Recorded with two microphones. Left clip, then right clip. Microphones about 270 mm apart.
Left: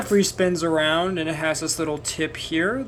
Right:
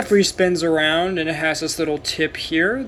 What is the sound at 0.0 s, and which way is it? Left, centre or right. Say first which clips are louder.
Speech: right 4 dB; centre.